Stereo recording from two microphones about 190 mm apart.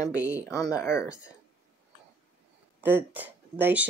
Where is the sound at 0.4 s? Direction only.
15° left (ahead or behind).